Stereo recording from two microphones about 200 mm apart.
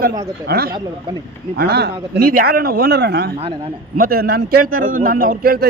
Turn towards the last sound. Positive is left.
turn(degrees=-50)  # may be behind; listen again after turning